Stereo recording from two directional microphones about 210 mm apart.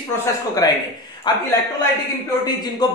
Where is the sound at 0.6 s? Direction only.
15° left (ahead or behind).